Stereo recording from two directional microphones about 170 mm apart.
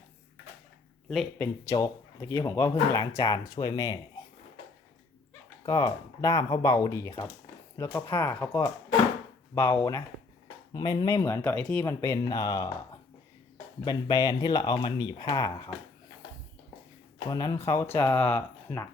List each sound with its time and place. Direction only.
1.4 s speech: 20° left (ahead or behind)
5.6 s speech: 25° left (ahead or behind)
13.8 s speech: 20° left (ahead or behind)
17.2 s speech: 20° left (ahead or behind)
17.9 s speech: 10° left (ahead or behind)